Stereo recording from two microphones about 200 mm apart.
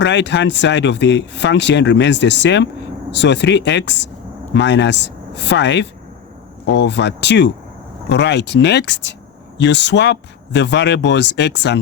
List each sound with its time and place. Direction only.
0.0 s speech: 60° left (ahead or behind)